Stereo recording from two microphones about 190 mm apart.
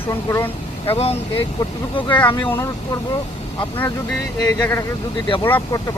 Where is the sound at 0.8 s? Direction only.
30° left (ahead or behind).